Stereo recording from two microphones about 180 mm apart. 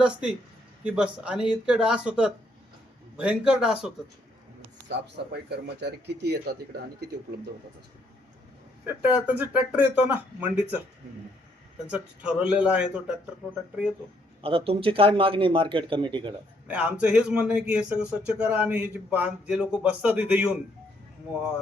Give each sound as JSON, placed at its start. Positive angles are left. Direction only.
{"t": 0.0, "sound": "speech", "side_deg": -5}
{"t": 4.9, "sound": "speech", "side_deg": -70}
{"t": 9.0, "sound": "a man's voice", "side_deg": -10}
{"t": 11.9, "sound": "speech", "side_deg": -5}
{"t": 14.4, "sound": "speech", "side_deg": -30}
{"t": 16.6, "sound": "a man's voice", "side_deg": -5}